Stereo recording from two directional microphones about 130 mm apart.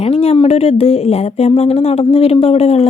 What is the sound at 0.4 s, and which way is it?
Speech, 55° left (ahead or behind).